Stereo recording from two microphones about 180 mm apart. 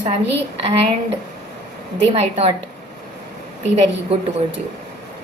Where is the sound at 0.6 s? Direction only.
30° right (ahead or behind).